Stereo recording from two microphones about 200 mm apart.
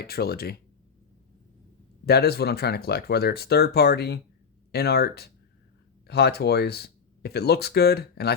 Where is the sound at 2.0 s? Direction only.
50° left (ahead or behind).